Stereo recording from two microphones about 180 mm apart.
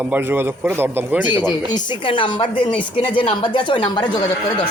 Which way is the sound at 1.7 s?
25° left (ahead or behind).